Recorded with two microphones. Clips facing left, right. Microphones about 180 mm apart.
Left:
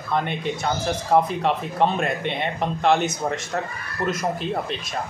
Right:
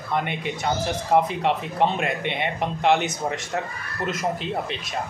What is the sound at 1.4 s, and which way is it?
A man's voice, 15° right (ahead or behind).